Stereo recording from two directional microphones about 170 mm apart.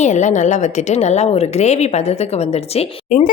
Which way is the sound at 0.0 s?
45° left (ahead or behind).